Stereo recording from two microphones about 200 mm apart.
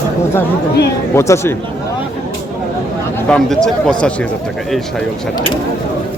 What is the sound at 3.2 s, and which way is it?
Speech, 5° left (ahead or behind).